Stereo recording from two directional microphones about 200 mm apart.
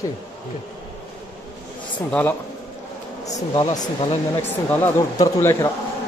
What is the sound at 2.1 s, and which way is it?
Speech, 5° left (ahead or behind).